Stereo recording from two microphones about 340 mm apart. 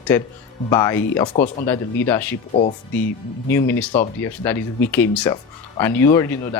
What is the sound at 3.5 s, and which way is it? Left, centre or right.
Speech, centre.